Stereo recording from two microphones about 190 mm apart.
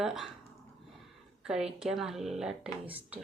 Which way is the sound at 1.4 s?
5° right (ahead or behind).